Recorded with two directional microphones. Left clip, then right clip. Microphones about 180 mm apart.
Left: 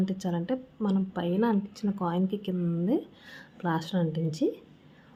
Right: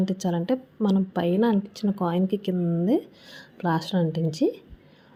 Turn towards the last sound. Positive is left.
turn(degrees=-20)  # may be behind; listen again after turning